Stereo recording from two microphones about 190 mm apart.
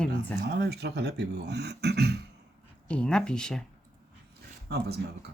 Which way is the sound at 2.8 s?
5° left (ahead or behind).